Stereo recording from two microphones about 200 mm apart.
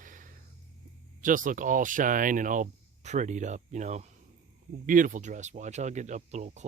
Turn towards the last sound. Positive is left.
turn(degrees=-35)  # may be behind; listen again after turning